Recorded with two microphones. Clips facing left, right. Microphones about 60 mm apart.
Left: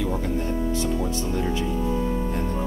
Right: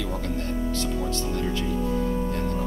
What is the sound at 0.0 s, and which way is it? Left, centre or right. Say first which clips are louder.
Music: left 4 dB; centre.